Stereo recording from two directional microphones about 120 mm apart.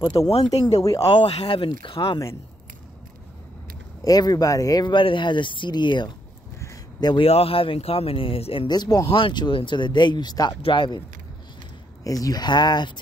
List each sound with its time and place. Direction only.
0.3 s speech: 60° left (ahead or behind)
4.0 s speech: 30° left (ahead or behind)
6.6 s a sound: 30° left (ahead or behind)
7.2 s speech: 55° left (ahead or behind)
8.6 s speech: 35° left (ahead or behind)
9.0 s speech: 45° left (ahead or behind)
12.0 s speech: 30° left (ahead or behind)